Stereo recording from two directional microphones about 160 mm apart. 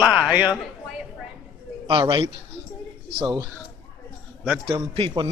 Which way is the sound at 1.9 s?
30° right (ahead or behind).